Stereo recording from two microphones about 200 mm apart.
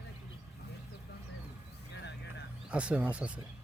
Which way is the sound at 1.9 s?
60° left (ahead or behind).